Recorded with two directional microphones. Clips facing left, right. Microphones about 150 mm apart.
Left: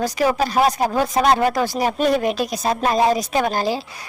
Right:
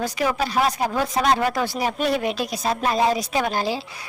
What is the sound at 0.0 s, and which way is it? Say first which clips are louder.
Speech: left 4 dB; 40° left (ahead or behind).